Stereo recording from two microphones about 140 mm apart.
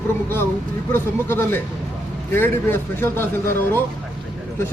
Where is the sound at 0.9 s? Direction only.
15° left (ahead or behind).